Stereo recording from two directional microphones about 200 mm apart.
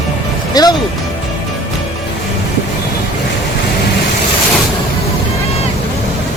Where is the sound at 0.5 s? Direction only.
20° left (ahead or behind).